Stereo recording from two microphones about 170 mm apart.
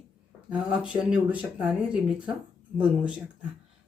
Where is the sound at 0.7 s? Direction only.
5° right (ahead or behind).